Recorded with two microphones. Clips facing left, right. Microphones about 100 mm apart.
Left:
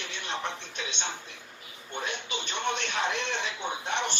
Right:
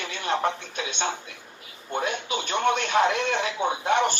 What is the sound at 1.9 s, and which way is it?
Speech, 55° right (ahead or behind).